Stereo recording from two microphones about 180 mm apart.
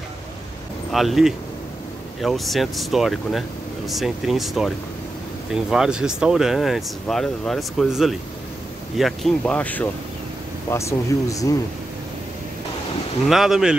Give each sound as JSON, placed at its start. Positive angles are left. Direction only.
{"t": 0.9, "sound": "speech", "side_deg": 0}
{"t": 13.3, "sound": "speech", "side_deg": 0}